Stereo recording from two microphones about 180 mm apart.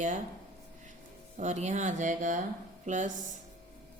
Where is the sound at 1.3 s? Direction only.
40° right (ahead or behind).